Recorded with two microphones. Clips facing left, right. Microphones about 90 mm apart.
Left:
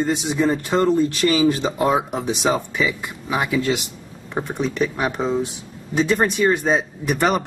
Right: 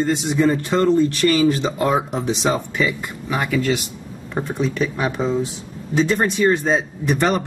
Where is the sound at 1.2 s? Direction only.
25° left (ahead or behind).